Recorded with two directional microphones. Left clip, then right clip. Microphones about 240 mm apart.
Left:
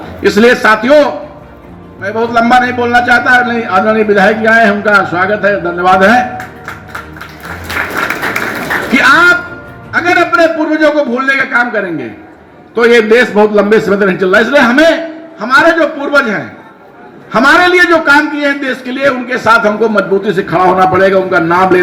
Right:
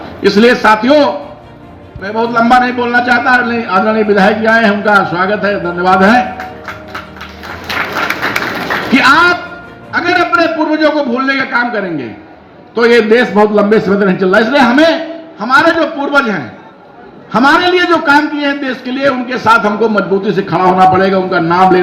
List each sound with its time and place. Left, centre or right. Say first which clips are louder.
0.2 s a man's voice: left 1 dB; right
8.9 s a sound: left 1 dB; right
9.9 s a man's voice: left 2 dB; right